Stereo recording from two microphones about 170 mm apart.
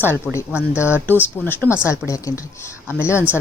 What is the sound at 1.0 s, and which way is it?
Speech, 10° left (ahead or behind).